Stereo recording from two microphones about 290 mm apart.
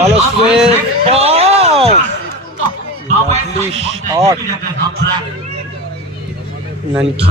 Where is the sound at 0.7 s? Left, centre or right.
Right.